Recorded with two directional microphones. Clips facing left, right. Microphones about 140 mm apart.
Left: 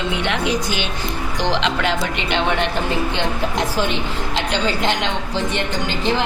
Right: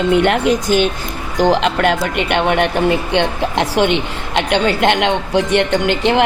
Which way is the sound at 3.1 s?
70° right (ahead or behind).